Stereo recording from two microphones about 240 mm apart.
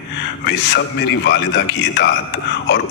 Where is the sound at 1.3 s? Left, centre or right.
Left.